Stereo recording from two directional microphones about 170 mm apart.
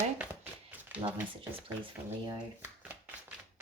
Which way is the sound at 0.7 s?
10° right (ahead or behind).